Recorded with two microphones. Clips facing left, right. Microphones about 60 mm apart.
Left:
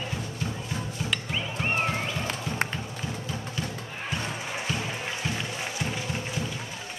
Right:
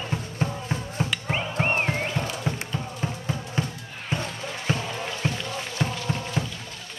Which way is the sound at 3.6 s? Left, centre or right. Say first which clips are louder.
Right 3 dB; right.